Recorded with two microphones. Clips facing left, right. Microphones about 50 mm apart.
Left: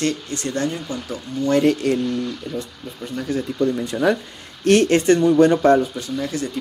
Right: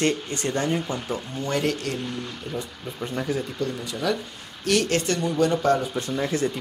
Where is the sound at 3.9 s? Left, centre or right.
Left.